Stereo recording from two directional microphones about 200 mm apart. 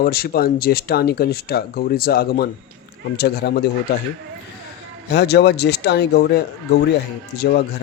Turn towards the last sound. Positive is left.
turn(degrees=50)  # may be behind; listen again after turning